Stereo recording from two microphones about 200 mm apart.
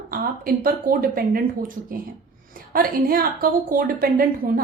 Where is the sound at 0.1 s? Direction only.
45° right (ahead or behind).